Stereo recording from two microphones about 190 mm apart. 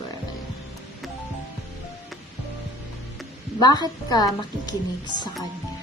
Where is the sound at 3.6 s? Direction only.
20° left (ahead or behind).